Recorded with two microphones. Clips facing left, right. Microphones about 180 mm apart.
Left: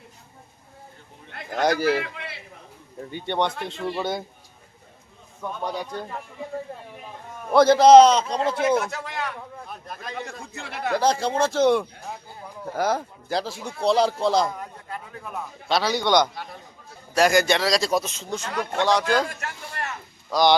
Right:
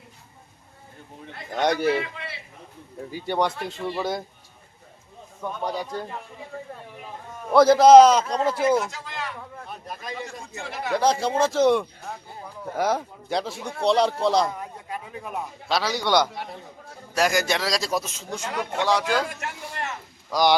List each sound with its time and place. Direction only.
1.5 s a man's voice: centre (ahead or behind)
3.1 s a man's voice: 5° right (ahead or behind)
5.4 s a man's voice: centre (ahead or behind)
7.5 s a man's voice: centre (ahead or behind)
8.8 s speech: 60° left (ahead or behind)
9.8 s speech: 10° right (ahead or behind)
10.9 s a man's voice: centre (ahead or behind)
15.7 s a man's voice: centre (ahead or behind)
19.4 s speech: 20° right (ahead or behind)